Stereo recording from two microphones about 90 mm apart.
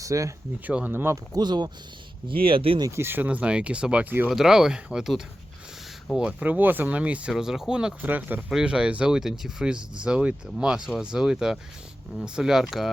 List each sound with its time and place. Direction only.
0.0 s speech: 35° right (ahead or behind)
0.7 s speech: 15° right (ahead or behind)
0.9 s speech: 30° right (ahead or behind)
1.3 s speech: 55° right (ahead or behind)
2.2 s speech: 80° right
2.9 s speech: 25° right (ahead or behind); by 7.9 s 10° right (ahead or behind)
8.0 s speech: 20° right (ahead or behind)
8.4 s speech: 10° right (ahead or behind)